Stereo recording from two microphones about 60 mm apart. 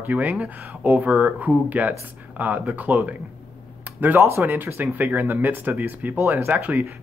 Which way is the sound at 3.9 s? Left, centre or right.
Right.